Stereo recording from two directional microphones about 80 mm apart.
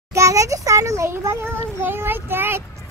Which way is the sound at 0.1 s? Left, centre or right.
Right.